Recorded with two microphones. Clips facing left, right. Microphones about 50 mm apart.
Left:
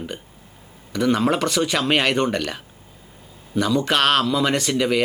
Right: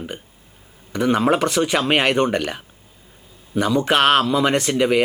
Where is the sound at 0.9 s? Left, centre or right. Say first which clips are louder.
Right 2 dB; centre.